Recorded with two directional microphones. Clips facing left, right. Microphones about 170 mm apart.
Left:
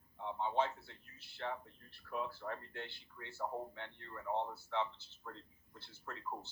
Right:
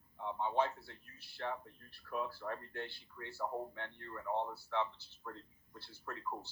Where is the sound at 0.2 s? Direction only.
20° left (ahead or behind).